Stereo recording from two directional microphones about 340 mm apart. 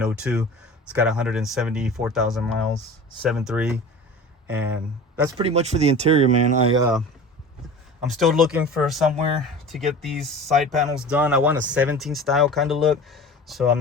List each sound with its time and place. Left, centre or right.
0.0 s speech: centre
5.4 s speech: centre
8.0 s speech: centre